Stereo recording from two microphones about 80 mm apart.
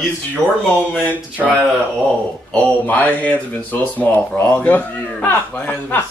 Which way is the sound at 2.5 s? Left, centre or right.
Centre.